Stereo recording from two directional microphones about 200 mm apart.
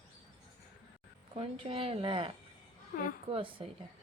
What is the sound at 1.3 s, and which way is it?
Speech, 25° right (ahead or behind).